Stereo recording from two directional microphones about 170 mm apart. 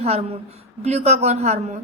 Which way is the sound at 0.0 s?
40° right (ahead or behind).